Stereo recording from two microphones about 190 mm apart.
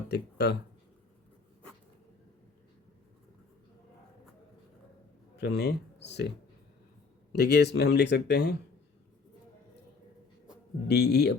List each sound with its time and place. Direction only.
0.1 s speech: 60° left (ahead or behind)
5.4 s speech: 60° left (ahead or behind)
7.3 s speech: 60° left (ahead or behind)
10.8 s speech: 60° left (ahead or behind)